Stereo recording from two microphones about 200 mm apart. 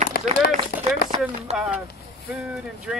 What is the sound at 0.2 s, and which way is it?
Run, 55° left (ahead or behind).